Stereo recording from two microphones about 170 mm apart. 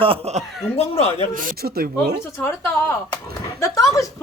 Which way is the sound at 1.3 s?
55° right (ahead or behind).